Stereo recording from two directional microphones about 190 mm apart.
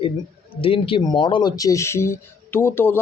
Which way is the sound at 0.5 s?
30° left (ahead or behind).